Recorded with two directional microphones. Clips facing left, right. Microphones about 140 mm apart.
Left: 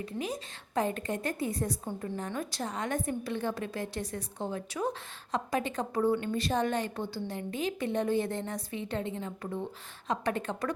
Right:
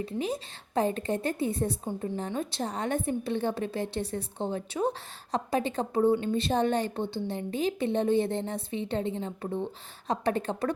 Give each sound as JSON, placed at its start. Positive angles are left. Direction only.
{"t": 0.0, "sound": "a woman's voice", "side_deg": -30}